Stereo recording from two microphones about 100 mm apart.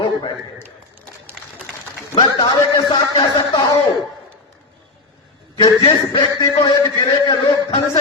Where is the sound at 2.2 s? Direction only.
50° left (ahead or behind).